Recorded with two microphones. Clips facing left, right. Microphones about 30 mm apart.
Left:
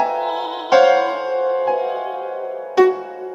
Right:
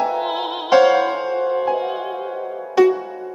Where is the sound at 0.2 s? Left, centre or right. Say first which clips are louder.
Even; centre.